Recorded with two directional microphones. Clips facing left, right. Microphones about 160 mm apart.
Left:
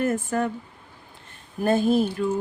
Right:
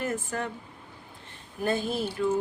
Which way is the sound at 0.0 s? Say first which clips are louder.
Left 7 dB; 50° left (ahead or behind).